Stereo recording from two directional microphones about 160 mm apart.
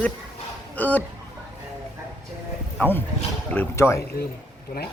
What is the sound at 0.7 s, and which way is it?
Speech, 10° left (ahead or behind).